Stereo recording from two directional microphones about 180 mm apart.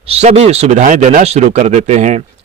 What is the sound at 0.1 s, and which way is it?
Speech, 35° right (ahead or behind).